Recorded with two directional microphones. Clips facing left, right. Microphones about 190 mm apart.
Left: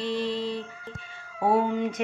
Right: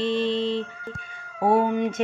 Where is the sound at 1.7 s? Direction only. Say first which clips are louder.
Right 3 dB; 25° right (ahead or behind).